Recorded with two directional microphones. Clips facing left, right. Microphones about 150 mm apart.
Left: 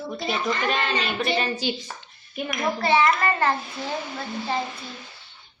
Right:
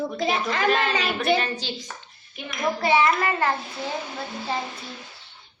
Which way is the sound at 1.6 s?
15° left (ahead or behind).